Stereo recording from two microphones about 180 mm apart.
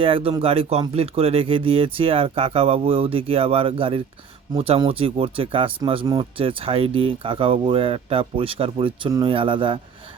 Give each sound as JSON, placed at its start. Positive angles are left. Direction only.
{"t": 0.0, "sound": "speech", "side_deg": -30}